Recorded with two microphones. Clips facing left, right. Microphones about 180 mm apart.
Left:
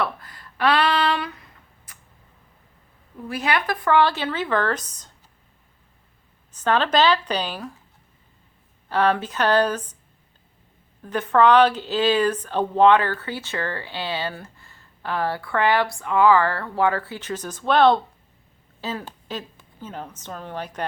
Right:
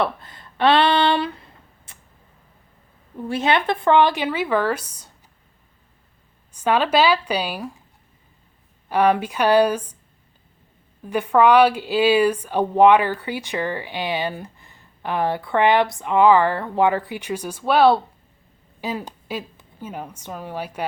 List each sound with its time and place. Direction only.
0.0 s a sound: 25° right (ahead or behind)
3.2 s speech: 25° right (ahead or behind); by 5.1 s 10° right (ahead or behind)
6.5 s speech: 10° right (ahead or behind)
8.9 s speech: 15° right (ahead or behind)
11.0 s a woman's voice: 10° right (ahead or behind)